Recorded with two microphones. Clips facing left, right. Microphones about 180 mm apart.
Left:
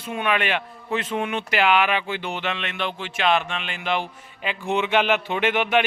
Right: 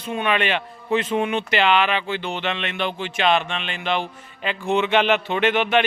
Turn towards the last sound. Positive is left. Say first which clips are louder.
# right 2 dB
turn(degrees=10)  # may be behind; listen again after turning